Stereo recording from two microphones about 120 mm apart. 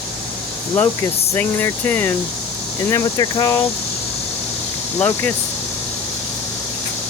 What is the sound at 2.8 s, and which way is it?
Speech, 25° left (ahead or behind).